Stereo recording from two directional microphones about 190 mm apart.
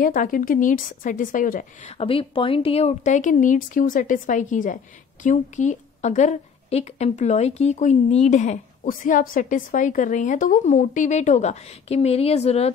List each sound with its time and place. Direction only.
0.0 s a woman's voice: 45° left (ahead or behind)